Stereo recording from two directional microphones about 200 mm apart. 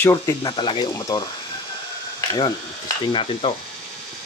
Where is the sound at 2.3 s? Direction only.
20° left (ahead or behind).